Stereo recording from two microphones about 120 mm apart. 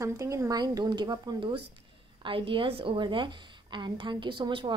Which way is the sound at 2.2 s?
45° right (ahead or behind).